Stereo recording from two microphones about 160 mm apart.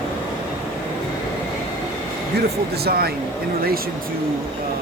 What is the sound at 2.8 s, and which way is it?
Speech, 80° right.